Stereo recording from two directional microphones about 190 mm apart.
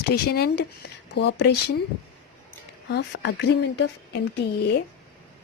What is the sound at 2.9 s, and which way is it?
Speech, 65° left (ahead or behind).